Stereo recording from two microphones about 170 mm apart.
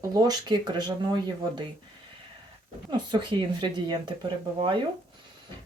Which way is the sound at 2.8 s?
25° right (ahead or behind).